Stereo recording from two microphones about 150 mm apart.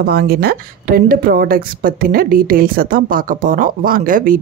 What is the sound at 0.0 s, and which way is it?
A woman's voice, 90° right.